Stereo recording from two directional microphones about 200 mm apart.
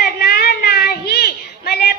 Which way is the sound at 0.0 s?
55° left (ahead or behind).